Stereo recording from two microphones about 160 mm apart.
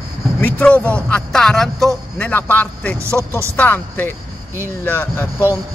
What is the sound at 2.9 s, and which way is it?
Speech, 15° right (ahead or behind).